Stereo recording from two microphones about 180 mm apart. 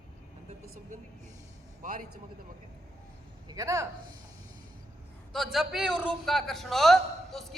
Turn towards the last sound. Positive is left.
turn(degrees=0)  # may be behind; listen again after turning